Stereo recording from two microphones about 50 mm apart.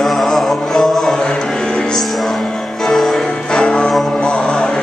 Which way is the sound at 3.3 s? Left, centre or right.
Centre.